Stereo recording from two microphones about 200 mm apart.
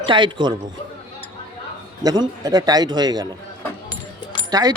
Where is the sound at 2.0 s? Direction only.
20° right (ahead or behind).